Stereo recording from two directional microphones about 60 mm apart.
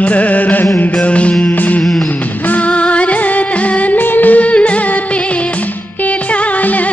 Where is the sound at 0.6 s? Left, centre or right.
Left.